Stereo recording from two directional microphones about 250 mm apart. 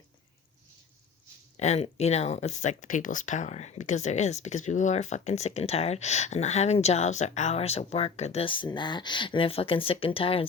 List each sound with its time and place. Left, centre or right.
1.5 s speech: left